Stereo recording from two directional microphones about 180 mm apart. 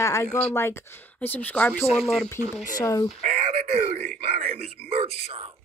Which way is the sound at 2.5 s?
15° left (ahead or behind).